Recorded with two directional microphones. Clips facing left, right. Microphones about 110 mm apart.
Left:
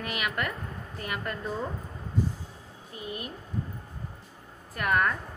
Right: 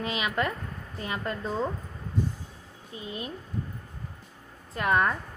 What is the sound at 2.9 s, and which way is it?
Speech, 25° right (ahead or behind).